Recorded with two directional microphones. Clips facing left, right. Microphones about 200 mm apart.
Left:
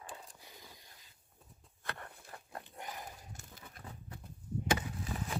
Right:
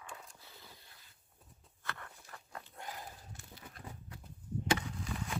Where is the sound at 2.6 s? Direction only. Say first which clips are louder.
Left 1 dB; 15° left (ahead or behind).